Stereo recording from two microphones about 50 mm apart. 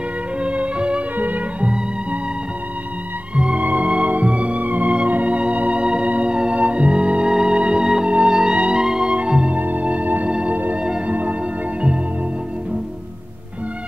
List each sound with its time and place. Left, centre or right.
0.4 s music: right
3.3 s music: right
9.6 s music: right